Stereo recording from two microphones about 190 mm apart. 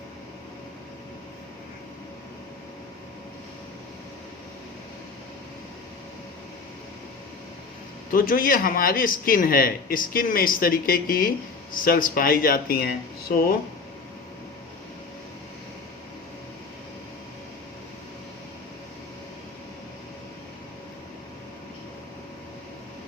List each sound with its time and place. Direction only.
8.1 s a man's voice: 50° left (ahead or behind)